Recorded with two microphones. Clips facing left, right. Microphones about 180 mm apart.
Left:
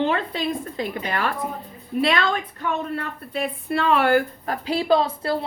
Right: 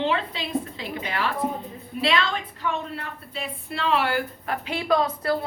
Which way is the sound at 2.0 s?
50° left (ahead or behind).